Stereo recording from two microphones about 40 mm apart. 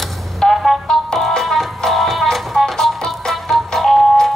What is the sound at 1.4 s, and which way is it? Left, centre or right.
Music, centre.